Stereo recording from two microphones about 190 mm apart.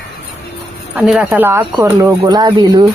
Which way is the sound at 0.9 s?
5° right (ahead or behind).